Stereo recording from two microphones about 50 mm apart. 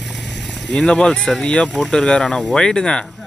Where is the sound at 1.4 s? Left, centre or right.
Centre.